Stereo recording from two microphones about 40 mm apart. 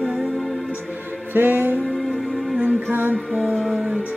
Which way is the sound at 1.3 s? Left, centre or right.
Right.